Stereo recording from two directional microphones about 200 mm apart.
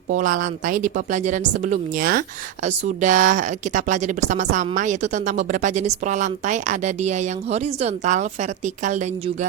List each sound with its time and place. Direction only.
0.1 s speech: 40° right (ahead or behind)